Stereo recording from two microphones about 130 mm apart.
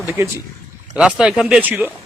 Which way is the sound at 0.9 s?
5° right (ahead or behind).